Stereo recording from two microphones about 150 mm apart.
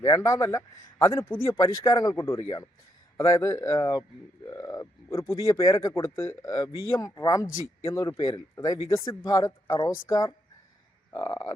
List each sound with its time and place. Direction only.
0.0 s speech: 20° left (ahead or behind)